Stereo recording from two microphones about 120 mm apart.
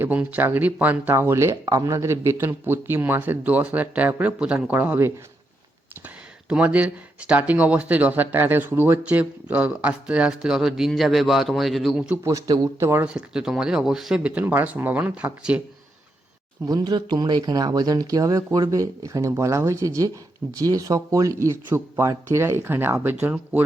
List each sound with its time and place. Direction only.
0.0 s speech: 15° right (ahead or behind)
6.5 s speech: 10° right (ahead or behind)
12.0 s speech: 15° right (ahead or behind)
12.3 s speech: 30° right (ahead or behind)
13.1 s speech: 5° right (ahead or behind)
16.6 s speech: 35° right (ahead or behind); by 23.6 s 15° right (ahead or behind)